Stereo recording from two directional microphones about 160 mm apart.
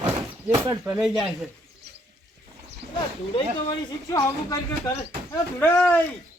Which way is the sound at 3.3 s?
25° left (ahead or behind).